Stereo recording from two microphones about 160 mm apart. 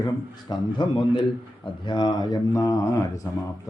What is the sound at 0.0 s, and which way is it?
Speech, 25° left (ahead or behind).